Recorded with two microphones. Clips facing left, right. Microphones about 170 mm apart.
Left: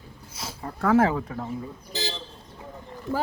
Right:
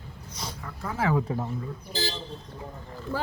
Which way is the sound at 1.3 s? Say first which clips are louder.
Right 3 dB; 25° right (ahead or behind).